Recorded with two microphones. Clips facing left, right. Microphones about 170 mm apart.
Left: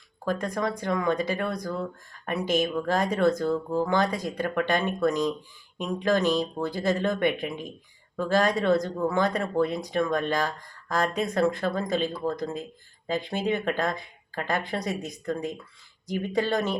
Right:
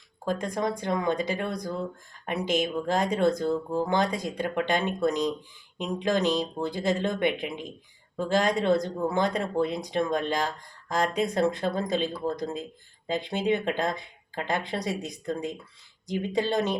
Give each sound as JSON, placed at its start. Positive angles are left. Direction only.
{"t": 0.3, "sound": "speech", "side_deg": -20}